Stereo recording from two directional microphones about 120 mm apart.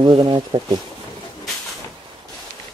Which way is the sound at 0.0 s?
40° right (ahead or behind).